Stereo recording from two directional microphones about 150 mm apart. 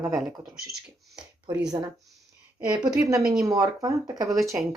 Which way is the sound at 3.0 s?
20° right (ahead or behind).